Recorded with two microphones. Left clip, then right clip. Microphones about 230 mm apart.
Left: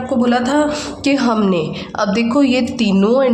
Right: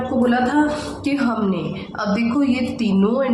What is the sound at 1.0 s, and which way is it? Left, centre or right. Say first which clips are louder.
A woman's voice: left 6 dB; left.